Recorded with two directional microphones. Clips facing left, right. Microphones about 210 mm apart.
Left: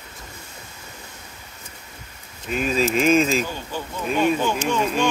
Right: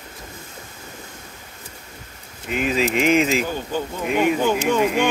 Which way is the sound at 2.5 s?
15° right (ahead or behind).